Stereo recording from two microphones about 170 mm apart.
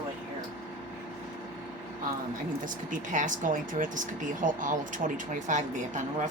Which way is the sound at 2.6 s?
50° right (ahead or behind).